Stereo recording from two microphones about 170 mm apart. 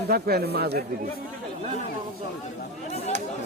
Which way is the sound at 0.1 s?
65° right (ahead or behind).